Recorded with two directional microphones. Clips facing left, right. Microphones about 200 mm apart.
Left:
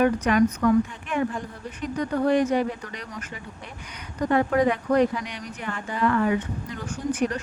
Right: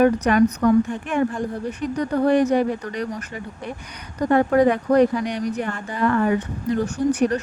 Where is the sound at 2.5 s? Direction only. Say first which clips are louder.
Right 4 dB; 40° right (ahead or behind).